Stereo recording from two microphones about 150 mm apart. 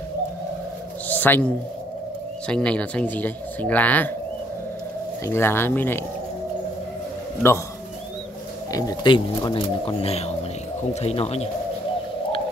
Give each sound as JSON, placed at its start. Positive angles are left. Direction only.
{"t": 1.0, "sound": "a sound", "side_deg": 10}
{"t": 2.4, "sound": "speech", "side_deg": 5}
{"t": 5.2, "sound": "speech", "side_deg": 15}
{"t": 8.7, "sound": "speech", "side_deg": 30}